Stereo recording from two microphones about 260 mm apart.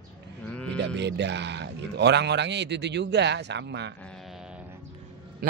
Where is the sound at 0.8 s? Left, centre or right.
Right.